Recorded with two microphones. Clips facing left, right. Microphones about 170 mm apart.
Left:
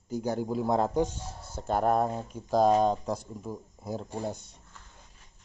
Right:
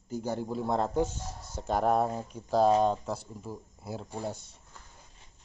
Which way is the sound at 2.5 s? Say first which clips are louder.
Left 1 dB; 10° left (ahead or behind).